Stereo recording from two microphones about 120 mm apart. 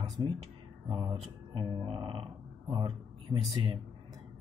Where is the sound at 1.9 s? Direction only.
45° right (ahead or behind).